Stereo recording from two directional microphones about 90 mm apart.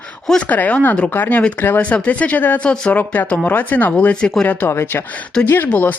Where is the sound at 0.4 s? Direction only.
20° left (ahead or behind).